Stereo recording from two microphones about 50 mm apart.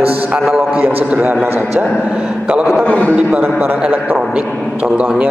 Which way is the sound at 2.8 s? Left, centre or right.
Left.